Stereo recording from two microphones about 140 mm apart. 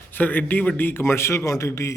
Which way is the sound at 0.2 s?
10° left (ahead or behind).